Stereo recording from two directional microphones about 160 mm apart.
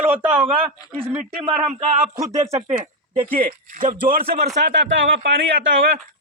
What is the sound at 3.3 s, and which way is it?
A man's voice, 60° right (ahead or behind).